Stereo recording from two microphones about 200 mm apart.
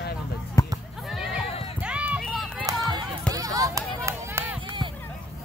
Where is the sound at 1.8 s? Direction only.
5° right (ahead or behind).